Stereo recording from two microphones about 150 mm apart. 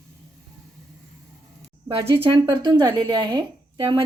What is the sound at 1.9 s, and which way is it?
Speech, 35° right (ahead or behind).